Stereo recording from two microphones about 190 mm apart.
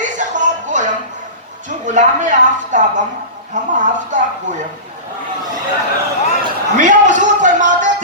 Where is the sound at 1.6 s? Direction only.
40° right (ahead or behind).